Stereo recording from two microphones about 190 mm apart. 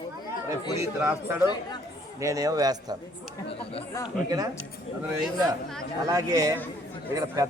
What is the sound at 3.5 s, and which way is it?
Chant, 30° left (ahead or behind).